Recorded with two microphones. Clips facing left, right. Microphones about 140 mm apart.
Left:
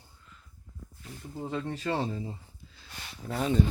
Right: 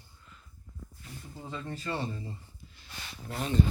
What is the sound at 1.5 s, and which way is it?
Speech, 75° left (ahead or behind).